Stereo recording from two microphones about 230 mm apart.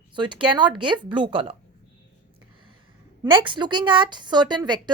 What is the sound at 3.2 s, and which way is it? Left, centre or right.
A woman's voice, right.